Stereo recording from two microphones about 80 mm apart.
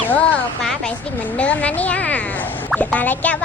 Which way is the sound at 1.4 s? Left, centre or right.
Centre.